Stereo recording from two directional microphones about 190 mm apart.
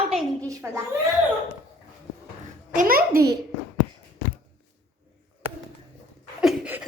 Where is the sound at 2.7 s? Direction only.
50° right (ahead or behind).